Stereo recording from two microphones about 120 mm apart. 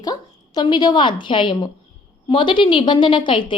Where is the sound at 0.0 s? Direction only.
35° left (ahead or behind).